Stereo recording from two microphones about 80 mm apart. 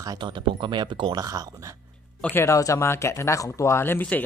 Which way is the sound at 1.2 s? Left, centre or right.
Right.